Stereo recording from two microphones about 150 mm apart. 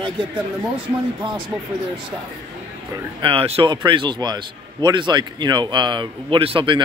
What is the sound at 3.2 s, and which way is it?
A man's voice, 40° right (ahead or behind).